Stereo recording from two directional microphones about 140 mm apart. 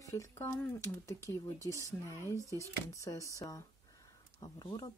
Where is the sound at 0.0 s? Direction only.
25° left (ahead or behind).